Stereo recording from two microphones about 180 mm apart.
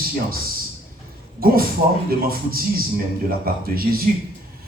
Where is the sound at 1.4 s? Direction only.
55° right (ahead or behind).